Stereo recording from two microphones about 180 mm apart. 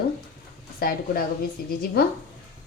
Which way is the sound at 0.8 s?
55° left (ahead or behind).